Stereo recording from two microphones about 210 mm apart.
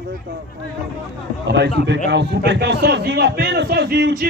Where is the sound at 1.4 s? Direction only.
55° right (ahead or behind).